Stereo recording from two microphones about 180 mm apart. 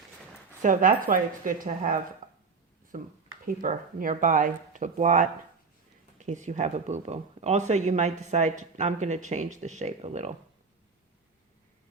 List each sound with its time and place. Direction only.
0.6 s speech: 45° right (ahead or behind)
2.2 s a sound: 45° right (ahead or behind)
2.9 s speech: 45° right (ahead or behind)